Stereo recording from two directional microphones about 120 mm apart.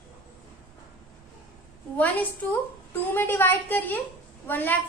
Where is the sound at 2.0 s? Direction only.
15° left (ahead or behind).